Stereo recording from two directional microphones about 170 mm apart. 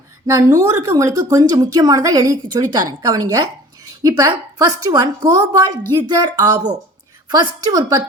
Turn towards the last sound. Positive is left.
turn(degrees=-20)  # may be behind; listen again after turning